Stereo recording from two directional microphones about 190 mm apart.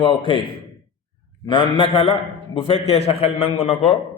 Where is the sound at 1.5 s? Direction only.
25° left (ahead or behind).